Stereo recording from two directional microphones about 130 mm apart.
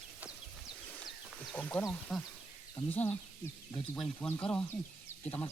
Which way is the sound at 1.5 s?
10° left (ahead or behind).